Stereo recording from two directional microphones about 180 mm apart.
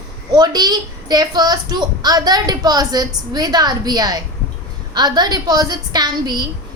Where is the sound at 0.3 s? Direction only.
20° right (ahead or behind).